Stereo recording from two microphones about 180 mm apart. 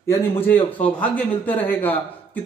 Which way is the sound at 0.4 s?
10° left (ahead or behind).